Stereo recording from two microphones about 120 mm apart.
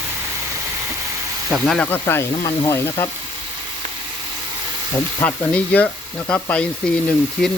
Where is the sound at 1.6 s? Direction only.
10° left (ahead or behind).